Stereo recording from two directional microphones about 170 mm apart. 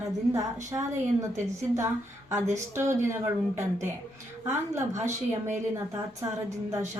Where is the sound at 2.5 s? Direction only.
15° right (ahead or behind).